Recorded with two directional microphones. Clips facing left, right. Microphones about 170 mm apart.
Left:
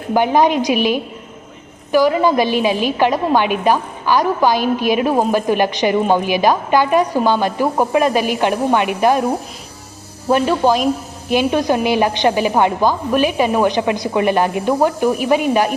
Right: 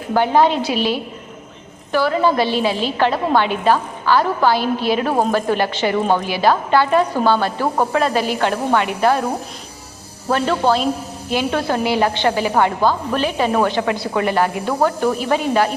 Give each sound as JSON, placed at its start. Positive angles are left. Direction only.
{"t": 0.1, "sound": "a woman's voice", "side_deg": 15}
{"t": 10.2, "sound": "a woman's voice", "side_deg": 15}